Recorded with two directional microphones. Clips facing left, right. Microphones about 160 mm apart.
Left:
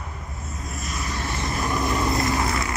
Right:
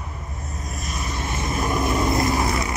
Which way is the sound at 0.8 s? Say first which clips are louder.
Right 1 dB; 15° right (ahead or behind).